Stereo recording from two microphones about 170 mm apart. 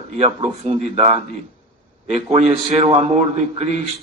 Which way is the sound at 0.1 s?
40° right (ahead or behind).